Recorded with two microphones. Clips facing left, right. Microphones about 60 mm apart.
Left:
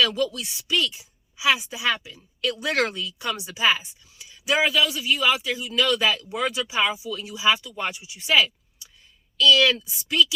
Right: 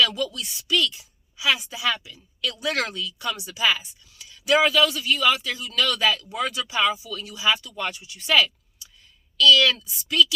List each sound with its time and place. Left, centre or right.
0.0 s a woman's voice: left
4.3 s a woman's voice: centre